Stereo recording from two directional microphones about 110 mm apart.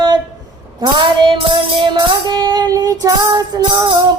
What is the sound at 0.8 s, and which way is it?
Music, 45° right (ahead or behind).